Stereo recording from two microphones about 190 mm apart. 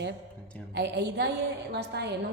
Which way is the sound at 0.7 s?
60° right (ahead or behind).